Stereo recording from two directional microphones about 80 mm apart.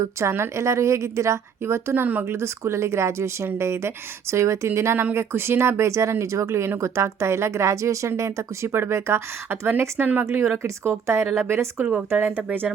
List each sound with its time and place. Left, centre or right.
0.0 s speech: right
11.9 s speech: centre